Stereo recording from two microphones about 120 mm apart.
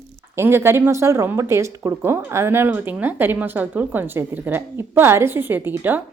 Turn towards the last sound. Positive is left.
turn(degrees=-15)  # may be behind; listen again after turning